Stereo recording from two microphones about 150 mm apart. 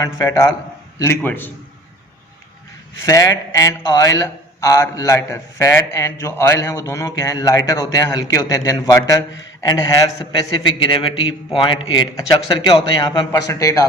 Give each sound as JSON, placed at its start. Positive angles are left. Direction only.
{"t": 0.0, "sound": "a man's voice", "side_deg": 20}
{"t": 3.0, "sound": "a man's voice", "side_deg": 20}